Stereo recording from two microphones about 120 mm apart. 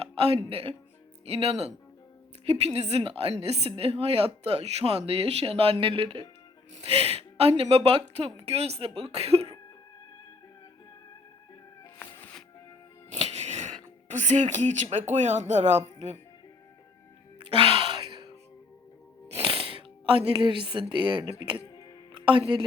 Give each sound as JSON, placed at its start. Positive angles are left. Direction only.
{"t": 0.0, "sound": "music", "side_deg": -55}
{"t": 1.2, "sound": "a woman's voice", "side_deg": -60}
{"t": 6.9, "sound": "a woman's voice", "side_deg": -55}
{"t": 11.9, "sound": "music", "side_deg": 15}
{"t": 13.1, "sound": "music", "side_deg": -65}
{"t": 14.1, "sound": "speech", "side_deg": -90}
{"t": 17.4, "sound": "gasp", "side_deg": -50}
{"t": 19.3, "sound": "music", "side_deg": -50}
{"t": 20.9, "sound": "speech", "side_deg": -40}
{"t": 21.7, "sound": "music", "side_deg": 30}
{"t": 22.1, "sound": "a woman's voice", "side_deg": -45}